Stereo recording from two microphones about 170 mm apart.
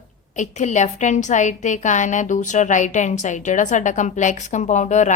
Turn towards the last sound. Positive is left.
turn(degrees=45)  # may be behind; listen again after turning